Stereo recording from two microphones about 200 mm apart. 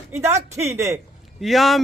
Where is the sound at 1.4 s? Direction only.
Centre (ahead or behind).